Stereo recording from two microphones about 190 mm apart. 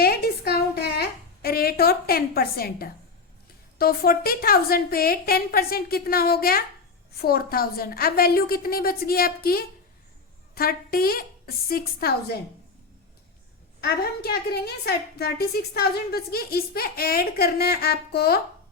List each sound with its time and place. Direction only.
0.0 s a sound: 55° left (ahead or behind)
3.8 s a woman's voice: 55° left (ahead or behind)
13.8 s a woman's voice: 55° left (ahead or behind)